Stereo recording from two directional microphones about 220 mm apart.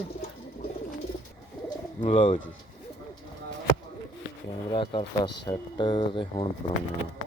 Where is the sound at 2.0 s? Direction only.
25° left (ahead or behind).